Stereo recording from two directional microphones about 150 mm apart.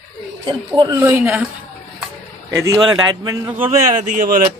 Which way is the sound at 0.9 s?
15° right (ahead or behind).